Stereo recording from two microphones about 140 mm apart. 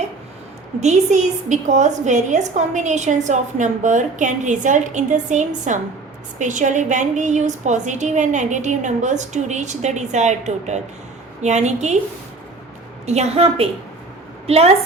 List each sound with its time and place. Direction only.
0.8 s a woman's voice: 55° right (ahead or behind)
13.1 s a woman's voice: 50° right (ahead or behind)